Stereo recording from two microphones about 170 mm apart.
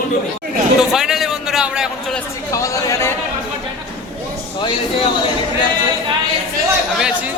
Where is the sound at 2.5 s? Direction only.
20° left (ahead or behind).